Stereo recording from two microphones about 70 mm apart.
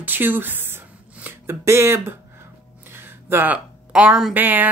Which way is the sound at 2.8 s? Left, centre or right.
Right.